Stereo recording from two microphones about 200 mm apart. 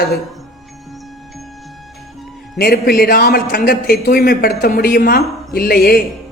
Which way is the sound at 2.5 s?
50° left (ahead or behind).